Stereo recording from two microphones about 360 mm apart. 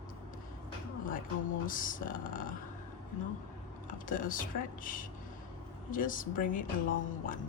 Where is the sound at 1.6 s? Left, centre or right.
Left.